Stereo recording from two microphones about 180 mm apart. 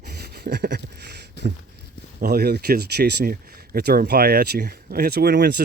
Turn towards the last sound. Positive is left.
turn(degrees=-65)  # may be behind; listen again after turning